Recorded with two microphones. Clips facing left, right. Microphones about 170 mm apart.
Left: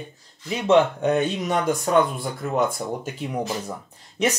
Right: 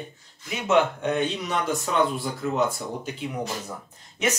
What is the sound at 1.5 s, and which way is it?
Speech, 50° left (ahead or behind).